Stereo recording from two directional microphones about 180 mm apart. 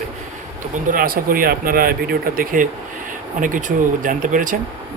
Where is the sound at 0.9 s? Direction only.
50° right (ahead or behind).